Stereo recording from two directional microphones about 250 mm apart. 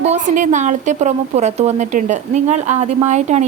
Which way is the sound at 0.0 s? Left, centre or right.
Right.